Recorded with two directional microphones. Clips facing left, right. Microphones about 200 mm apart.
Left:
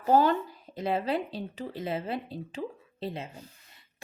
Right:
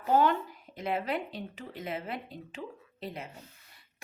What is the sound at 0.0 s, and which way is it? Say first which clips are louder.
A woman's voice: left 3 dB; 35° left (ahead or behind).